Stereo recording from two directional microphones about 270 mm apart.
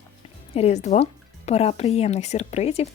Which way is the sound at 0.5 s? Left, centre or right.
Left.